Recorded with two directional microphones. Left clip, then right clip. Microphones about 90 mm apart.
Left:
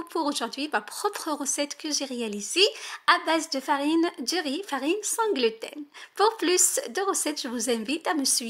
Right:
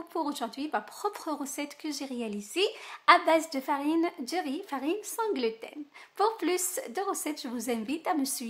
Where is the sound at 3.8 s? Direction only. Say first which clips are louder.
Left 4 dB; 30° left (ahead or behind).